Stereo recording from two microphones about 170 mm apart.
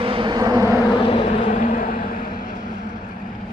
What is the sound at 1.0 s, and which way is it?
Vehicle, 35° left (ahead or behind).